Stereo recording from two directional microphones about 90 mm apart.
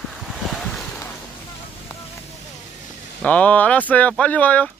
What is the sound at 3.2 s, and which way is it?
Speech, 15° left (ahead or behind).